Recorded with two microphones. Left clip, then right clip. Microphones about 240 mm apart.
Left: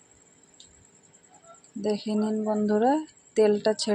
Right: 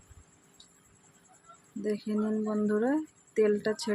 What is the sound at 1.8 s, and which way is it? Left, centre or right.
Speech, centre.